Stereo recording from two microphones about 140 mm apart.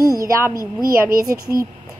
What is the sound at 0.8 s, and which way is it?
Speech, 90° right.